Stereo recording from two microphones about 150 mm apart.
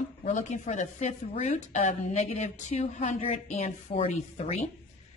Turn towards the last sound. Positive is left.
turn(degrees=45)  # may be behind; listen again after turning